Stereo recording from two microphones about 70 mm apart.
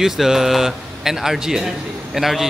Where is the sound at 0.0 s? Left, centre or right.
Centre.